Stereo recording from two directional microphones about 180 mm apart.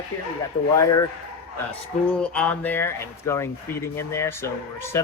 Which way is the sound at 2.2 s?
5° left (ahead or behind).